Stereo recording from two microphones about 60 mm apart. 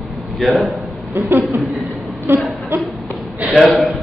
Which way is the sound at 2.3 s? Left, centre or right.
Right.